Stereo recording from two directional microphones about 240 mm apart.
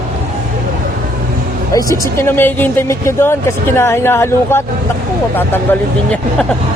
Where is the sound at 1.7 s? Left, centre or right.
Centre.